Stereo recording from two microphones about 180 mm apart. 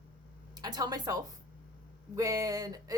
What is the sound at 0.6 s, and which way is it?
Speech, 20° right (ahead or behind).